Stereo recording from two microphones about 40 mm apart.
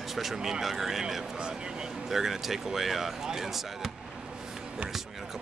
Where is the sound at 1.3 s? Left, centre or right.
Right.